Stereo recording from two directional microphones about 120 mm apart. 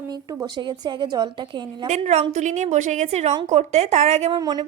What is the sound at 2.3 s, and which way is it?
A woman's voice, 80° right.